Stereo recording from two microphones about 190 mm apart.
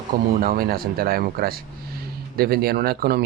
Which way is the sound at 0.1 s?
50° right (ahead or behind).